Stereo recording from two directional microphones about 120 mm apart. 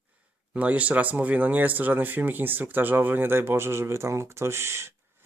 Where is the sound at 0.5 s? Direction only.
10° right (ahead or behind).